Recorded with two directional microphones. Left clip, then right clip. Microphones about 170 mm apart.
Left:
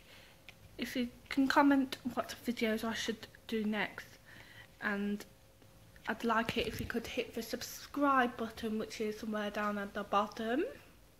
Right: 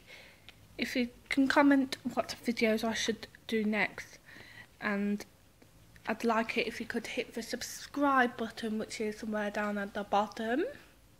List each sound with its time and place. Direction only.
0.7 s a woman's voice: 15° right (ahead or behind)
6.5 s a woman's voice: centre (ahead or behind)